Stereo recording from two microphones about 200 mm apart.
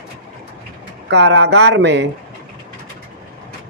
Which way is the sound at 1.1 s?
60° right (ahead or behind).